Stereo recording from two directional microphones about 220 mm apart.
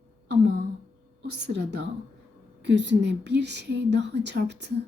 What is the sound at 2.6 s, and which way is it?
A woman's voice, 50° right (ahead or behind).